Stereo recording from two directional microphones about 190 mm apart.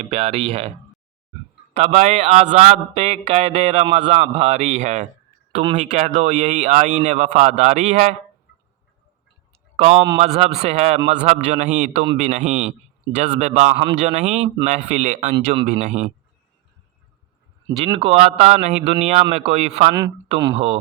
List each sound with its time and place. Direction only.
0.0 s speech: 30° right (ahead or behind)
1.7 s a man's voice: 35° right (ahead or behind)
9.7 s a man's voice: 30° right (ahead or behind)
17.7 s a man's voice: 25° right (ahead or behind)
19.9 s speech: 20° right (ahead or behind)